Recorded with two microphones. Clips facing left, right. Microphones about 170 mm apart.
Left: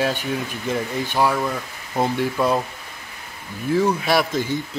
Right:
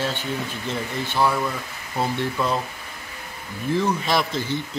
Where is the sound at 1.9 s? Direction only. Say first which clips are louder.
Left 3 dB; 15° left (ahead or behind).